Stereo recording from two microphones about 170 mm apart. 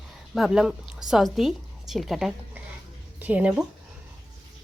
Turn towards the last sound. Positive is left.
turn(degrees=-5)  # may be behind; listen again after turning